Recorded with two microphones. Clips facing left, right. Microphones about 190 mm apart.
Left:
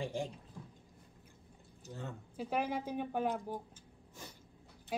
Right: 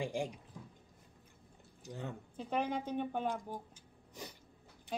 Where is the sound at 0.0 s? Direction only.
15° right (ahead or behind).